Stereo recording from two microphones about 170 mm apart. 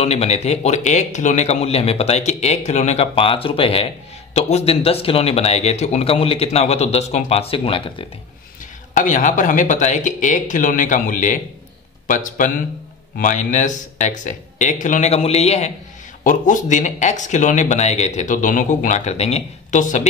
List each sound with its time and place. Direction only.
0.0 s speech: 40° left (ahead or behind)
8.9 s speech: 50° left (ahead or behind)